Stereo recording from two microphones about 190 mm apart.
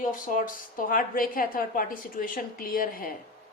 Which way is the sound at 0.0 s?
45° left (ahead or behind).